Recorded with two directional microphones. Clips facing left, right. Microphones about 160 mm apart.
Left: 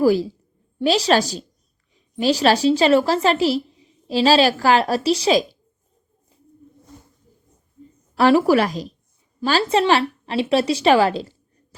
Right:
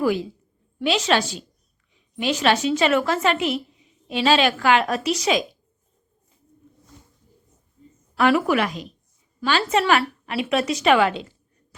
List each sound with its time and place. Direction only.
0.0 s a woman's voice: 35° left (ahead or behind)
8.1 s a woman's voice: 30° left (ahead or behind)